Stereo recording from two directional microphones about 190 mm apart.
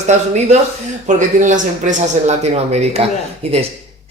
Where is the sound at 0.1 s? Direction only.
35° right (ahead or behind).